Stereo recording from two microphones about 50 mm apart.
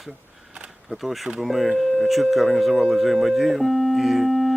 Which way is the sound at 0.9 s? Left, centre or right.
Centre.